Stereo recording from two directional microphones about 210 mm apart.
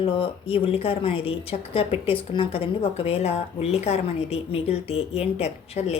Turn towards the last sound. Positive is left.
turn(degrees=30)  # may be behind; listen again after turning